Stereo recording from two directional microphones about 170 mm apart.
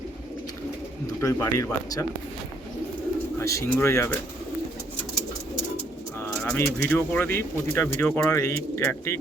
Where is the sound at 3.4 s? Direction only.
15° left (ahead or behind).